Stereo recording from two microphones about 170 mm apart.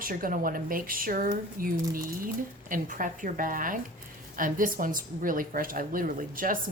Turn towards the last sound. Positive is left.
turn(degrees=-55)  # may be behind; listen again after turning